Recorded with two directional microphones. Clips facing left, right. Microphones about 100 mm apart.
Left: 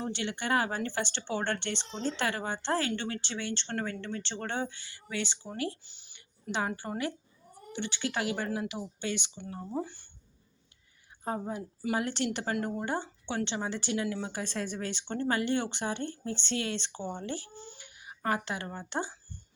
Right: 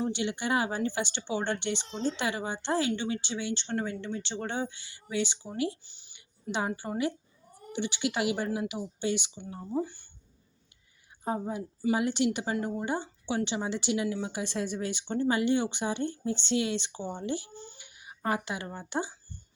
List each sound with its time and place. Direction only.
0.0 s speech: 10° right (ahead or behind)
11.4 s speech: 10° right (ahead or behind)
17.9 s a sound: 20° right (ahead or behind)
18.4 s speech: 15° right (ahead or behind)